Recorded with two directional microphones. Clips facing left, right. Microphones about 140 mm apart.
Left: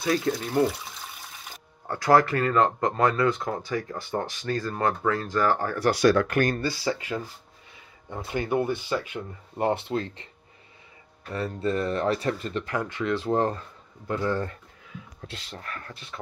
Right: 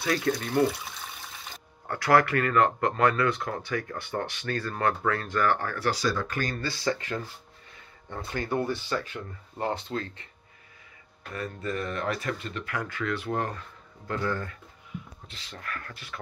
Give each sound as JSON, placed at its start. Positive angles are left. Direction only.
{"t": 0.0, "sound": "speech", "side_deg": 20}
{"t": 0.3, "sound": "speech", "side_deg": 10}
{"t": 1.9, "sound": "speech", "side_deg": 20}
{"t": 5.9, "sound": "speech", "side_deg": 65}
{"t": 6.6, "sound": "speech", "side_deg": 10}
{"t": 11.3, "sound": "speech", "side_deg": 30}
{"t": 15.5, "sound": "speech", "side_deg": 25}